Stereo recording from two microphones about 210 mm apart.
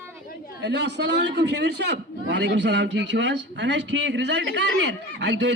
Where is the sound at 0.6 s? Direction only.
55° right (ahead or behind).